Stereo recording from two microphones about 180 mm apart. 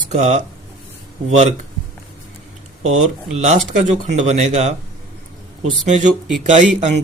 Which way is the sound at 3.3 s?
40° right (ahead or behind).